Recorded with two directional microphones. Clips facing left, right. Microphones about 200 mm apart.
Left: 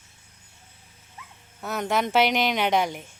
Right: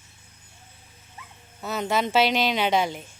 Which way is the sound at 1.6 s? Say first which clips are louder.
Even; 5° right (ahead or behind).